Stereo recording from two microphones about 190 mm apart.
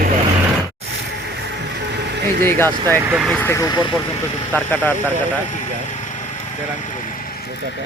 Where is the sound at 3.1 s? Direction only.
5° right (ahead or behind).